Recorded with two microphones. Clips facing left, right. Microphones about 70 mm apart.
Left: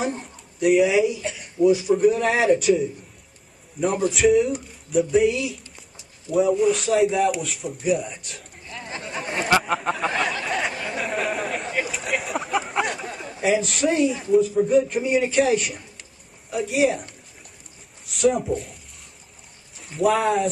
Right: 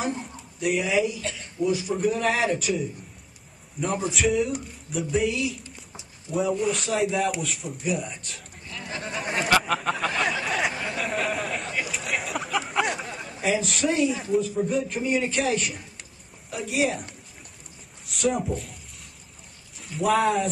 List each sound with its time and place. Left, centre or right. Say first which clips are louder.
0.1 s a man's voice: even; centre
1.2 s a sound: left 3 dB; centre
1.6 s a man's voice: left 7 dB; centre
2.7 s a man's voice: left 8 dB; centre
4.0 s a man's voice: left 7 dB; centre
8.6 s chatter: left 1 dB; left
9.3 s a sound: left 2 dB; centre
9.6 s a man's voice: left 1 dB; centre
10.2 s a sound: left 1 dB; centre
13.1 s a man's voice: left 4 dB; centre
19.8 s a man's voice: left 2 dB; centre